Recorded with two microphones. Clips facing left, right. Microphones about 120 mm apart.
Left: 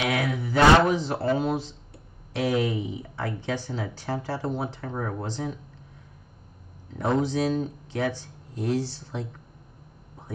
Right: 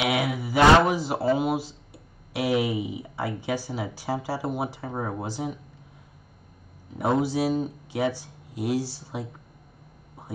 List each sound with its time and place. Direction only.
0.0 s speech: 10° right (ahead or behind)
7.0 s speech: 10° right (ahead or behind)